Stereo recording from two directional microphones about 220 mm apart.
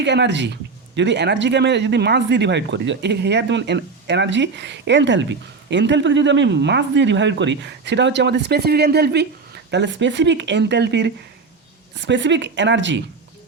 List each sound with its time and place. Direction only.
0.0 s speech: 55° right (ahead or behind)